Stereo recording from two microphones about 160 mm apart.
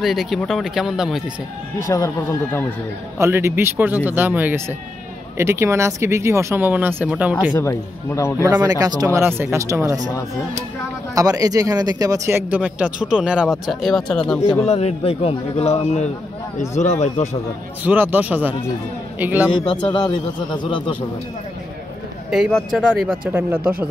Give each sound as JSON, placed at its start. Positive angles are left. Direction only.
{"t": 0.0, "sound": "speech", "side_deg": 0}
{"t": 1.9, "sound": "a man's voice", "side_deg": 15}
{"t": 3.2, "sound": "speech", "side_deg": -15}
{"t": 7.5, "sound": "a man's voice", "side_deg": 15}
{"t": 8.4, "sound": "speech", "side_deg": -25}
{"t": 11.1, "sound": "speech", "side_deg": -20}
{"t": 14.6, "sound": "a man's voice", "side_deg": 40}
{"t": 17.8, "sound": "a man's voice", "side_deg": -10}
{"t": 19.6, "sound": "speech", "side_deg": 30}
{"t": 22.3, "sound": "speech", "side_deg": 0}
{"t": 23.3, "sound": "speech", "side_deg": -10}